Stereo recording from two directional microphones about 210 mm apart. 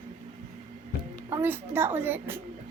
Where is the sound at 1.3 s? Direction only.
10° right (ahead or behind).